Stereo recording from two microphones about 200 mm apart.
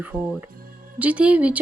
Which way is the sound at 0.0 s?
10° right (ahead or behind).